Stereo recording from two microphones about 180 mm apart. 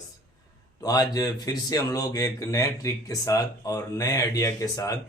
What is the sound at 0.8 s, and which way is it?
A man's voice, 20° left (ahead or behind).